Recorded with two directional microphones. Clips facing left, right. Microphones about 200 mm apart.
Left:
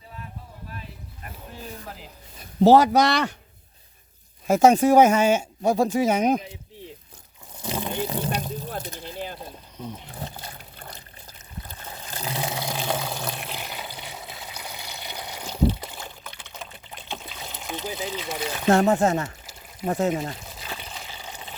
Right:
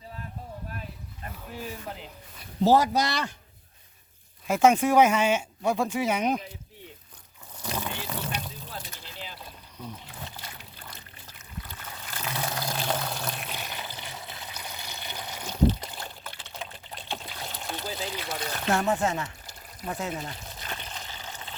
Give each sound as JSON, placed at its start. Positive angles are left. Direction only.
{"t": 2.6, "sound": "speech", "side_deg": 70}
{"t": 4.4, "sound": "speech", "side_deg": 40}
{"t": 7.6, "sound": "vehicle", "side_deg": 20}
{"t": 7.9, "sound": "speech", "side_deg": 20}
{"t": 8.2, "sound": "vehicle", "side_deg": 40}
{"t": 9.7, "sound": "wild animals", "side_deg": 20}
{"t": 10.1, "sound": "a sound", "side_deg": 40}
{"t": 11.8, "sound": "water", "side_deg": 25}
{"t": 12.8, "sound": "pour", "side_deg": 10}
{"t": 15.9, "sound": "trickle", "side_deg": 0}
{"t": 18.3, "sound": "a sound", "side_deg": 20}
{"t": 18.7, "sound": "speech", "side_deg": 45}
{"t": 20.6, "sound": "water", "side_deg": 5}